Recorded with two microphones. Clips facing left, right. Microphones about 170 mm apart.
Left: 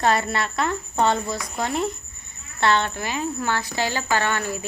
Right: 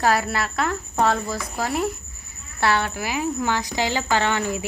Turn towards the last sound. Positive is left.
turn(degrees=-15)  # may be behind; listen again after turning